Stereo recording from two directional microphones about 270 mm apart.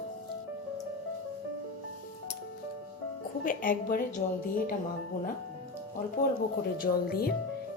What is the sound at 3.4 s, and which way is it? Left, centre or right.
Speech, left.